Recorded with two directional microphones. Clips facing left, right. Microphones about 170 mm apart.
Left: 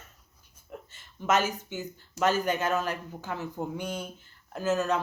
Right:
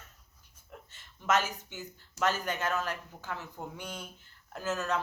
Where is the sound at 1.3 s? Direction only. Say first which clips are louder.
Left 3 dB; 5° left (ahead or behind).